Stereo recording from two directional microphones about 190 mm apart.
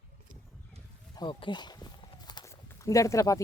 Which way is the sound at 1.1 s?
25° left (ahead or behind).